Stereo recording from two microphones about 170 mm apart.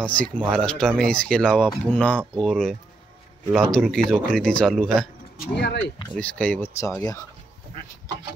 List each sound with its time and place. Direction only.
0.0 s speech: 5° left (ahead or behind)
5.4 s speech: 80° left
6.1 s speech: 10° left (ahead or behind)